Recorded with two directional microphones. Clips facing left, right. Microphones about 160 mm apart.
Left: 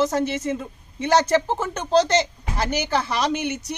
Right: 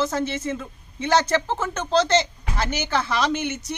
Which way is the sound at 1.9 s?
40° left (ahead or behind).